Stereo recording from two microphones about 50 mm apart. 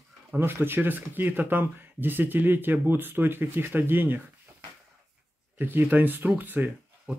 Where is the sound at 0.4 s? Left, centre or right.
Right.